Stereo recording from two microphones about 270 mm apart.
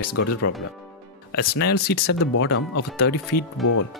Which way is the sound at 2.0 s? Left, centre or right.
Left.